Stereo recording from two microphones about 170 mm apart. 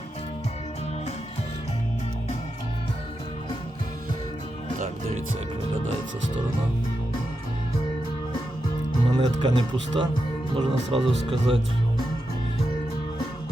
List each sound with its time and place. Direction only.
9.0 s speech: 25° right (ahead or behind)